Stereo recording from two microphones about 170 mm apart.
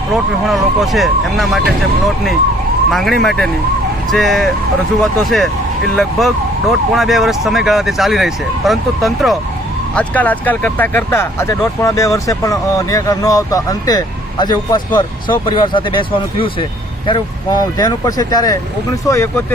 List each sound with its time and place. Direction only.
0.4 s speech: centre (ahead or behind)
2.9 s speech: centre (ahead or behind); by 19.5 s 15° left (ahead or behind)